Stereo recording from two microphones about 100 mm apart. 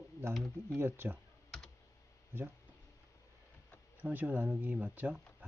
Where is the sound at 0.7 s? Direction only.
25° right (ahead or behind).